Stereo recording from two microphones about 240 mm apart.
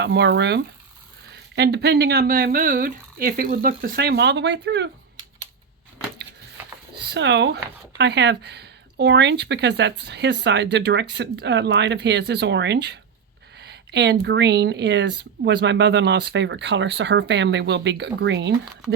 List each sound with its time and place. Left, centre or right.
0.0 s speech: right
6.9 s speech: right